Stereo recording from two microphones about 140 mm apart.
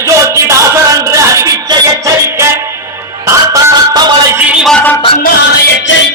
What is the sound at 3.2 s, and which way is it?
Music, 25° right (ahead or behind).